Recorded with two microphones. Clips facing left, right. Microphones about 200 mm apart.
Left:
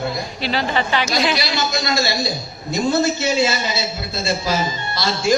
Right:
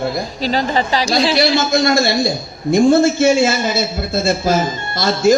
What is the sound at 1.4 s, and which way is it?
A man's voice, 55° right (ahead or behind).